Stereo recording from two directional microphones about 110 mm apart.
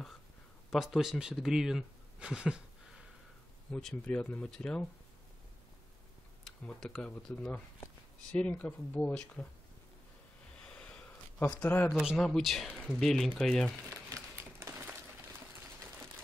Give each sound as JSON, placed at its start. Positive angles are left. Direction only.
{"t": 0.7, "sound": "speech", "side_deg": 0}
{"t": 3.7, "sound": "speech", "side_deg": 10}
{"t": 6.4, "sound": "speech", "side_deg": 5}
{"t": 10.6, "sound": "a sound", "side_deg": 5}
{"t": 11.9, "sound": "speech", "side_deg": -10}
{"t": 13.8, "sound": "a sound", "side_deg": -30}